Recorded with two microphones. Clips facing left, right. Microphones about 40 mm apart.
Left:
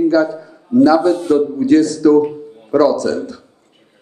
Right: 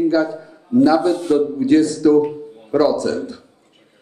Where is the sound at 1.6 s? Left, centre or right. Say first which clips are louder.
Left 2 dB; centre.